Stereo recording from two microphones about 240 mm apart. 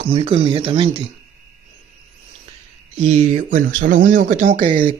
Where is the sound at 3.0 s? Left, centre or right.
Right.